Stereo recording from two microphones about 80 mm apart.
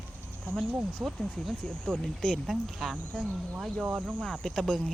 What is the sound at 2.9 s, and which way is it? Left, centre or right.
Speech, centre.